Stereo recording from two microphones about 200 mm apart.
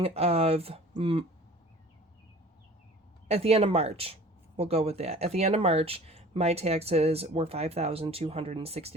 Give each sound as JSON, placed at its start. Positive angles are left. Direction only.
{"t": 0.0, "sound": "speech", "side_deg": -30}
{"t": 3.2, "sound": "speech", "side_deg": -30}